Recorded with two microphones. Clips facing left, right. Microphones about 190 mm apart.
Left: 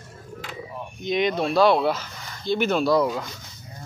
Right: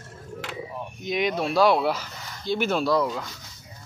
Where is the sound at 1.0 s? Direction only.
5° right (ahead or behind).